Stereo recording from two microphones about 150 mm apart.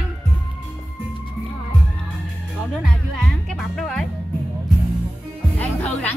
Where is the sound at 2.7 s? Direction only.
Centre (ahead or behind).